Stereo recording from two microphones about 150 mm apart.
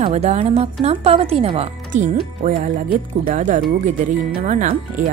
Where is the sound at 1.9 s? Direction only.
55° right (ahead or behind).